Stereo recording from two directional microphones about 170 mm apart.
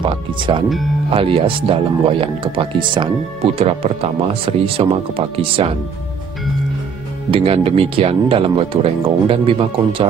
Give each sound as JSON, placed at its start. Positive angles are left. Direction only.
{"t": 0.0, "sound": "speech", "side_deg": -30}
{"t": 7.2, "sound": "speech", "side_deg": -35}